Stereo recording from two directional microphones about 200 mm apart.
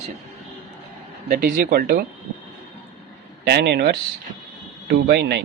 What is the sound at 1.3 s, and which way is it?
Speech, 45° right (ahead or behind).